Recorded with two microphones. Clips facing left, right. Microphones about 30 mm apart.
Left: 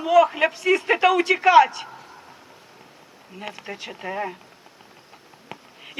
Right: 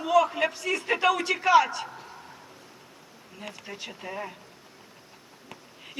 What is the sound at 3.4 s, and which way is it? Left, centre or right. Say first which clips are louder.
Speech: left 5 dB; left.